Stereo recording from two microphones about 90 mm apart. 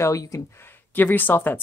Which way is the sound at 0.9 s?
20° left (ahead or behind).